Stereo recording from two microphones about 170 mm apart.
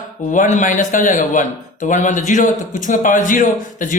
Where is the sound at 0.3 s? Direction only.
50° left (ahead or behind).